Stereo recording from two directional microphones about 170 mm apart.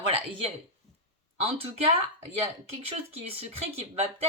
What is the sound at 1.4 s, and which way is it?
Speech, 35° right (ahead or behind).